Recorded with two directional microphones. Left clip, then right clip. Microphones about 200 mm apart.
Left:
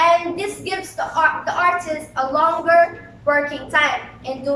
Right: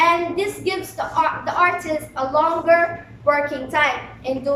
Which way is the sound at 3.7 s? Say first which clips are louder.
Left 2 dB; 20° right (ahead or behind).